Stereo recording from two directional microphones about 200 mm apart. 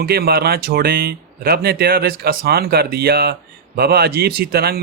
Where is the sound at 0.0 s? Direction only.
50° right (ahead or behind).